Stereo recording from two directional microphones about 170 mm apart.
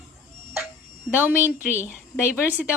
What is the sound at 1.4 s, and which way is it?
A woman's voice, 10° right (ahead or behind).